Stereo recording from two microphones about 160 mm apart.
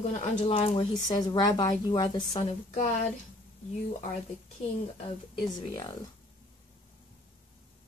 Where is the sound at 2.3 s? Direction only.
45° left (ahead or behind).